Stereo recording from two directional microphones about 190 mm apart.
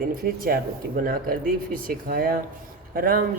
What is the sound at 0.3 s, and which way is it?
Speech, 50° right (ahead or behind).